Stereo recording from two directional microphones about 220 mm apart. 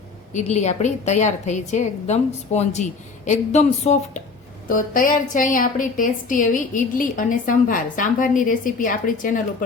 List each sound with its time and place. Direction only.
0.3 s a woman's voice: 30° left (ahead or behind)